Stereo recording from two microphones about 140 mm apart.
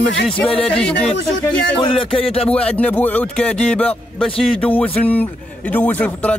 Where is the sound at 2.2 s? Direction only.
45° left (ahead or behind).